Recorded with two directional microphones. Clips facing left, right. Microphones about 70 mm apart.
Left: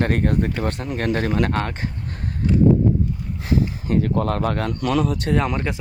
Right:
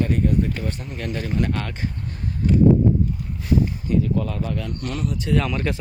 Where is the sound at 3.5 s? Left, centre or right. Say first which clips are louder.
Even; left.